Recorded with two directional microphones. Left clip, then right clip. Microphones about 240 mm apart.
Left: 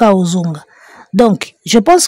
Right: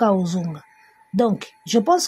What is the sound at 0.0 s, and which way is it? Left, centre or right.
Speech, left.